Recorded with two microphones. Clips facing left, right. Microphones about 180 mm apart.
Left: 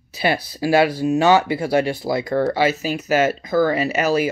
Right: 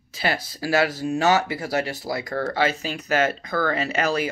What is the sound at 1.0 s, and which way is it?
Speech, 15° left (ahead or behind).